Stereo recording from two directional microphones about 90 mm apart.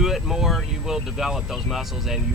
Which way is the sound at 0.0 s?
5° right (ahead or behind).